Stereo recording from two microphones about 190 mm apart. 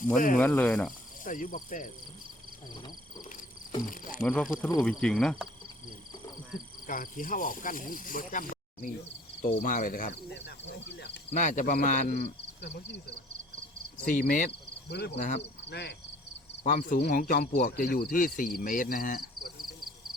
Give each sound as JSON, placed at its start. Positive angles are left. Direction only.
{"t": 0.0, "sound": "speech", "side_deg": 45}
{"t": 0.3, "sound": "speech", "side_deg": 10}
{"t": 1.2, "sound": "speech", "side_deg": 45}
{"t": 4.2, "sound": "speech", "side_deg": 5}
{"t": 6.8, "sound": "speech", "side_deg": 45}
{"t": 10.3, "sound": "speech", "side_deg": 70}
{"t": 11.3, "sound": "speech", "side_deg": 40}
{"t": 14.0, "sound": "speech", "side_deg": 45}
{"t": 14.8, "sound": "speech", "side_deg": 60}
{"t": 15.1, "sound": "speech", "side_deg": 40}
{"t": 15.7, "sound": "speech", "side_deg": 60}
{"t": 16.6, "sound": "speech", "side_deg": 50}